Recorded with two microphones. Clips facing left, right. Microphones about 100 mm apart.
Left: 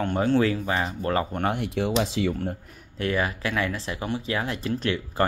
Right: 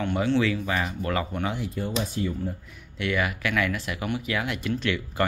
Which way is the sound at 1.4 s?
60° left (ahead or behind).